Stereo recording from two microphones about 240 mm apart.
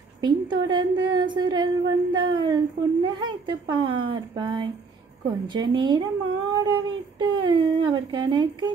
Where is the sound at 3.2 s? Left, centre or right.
Right.